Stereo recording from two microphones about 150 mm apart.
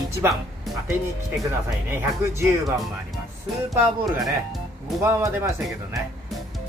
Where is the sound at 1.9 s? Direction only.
15° right (ahead or behind).